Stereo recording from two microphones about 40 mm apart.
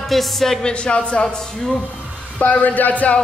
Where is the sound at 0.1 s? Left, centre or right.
Centre.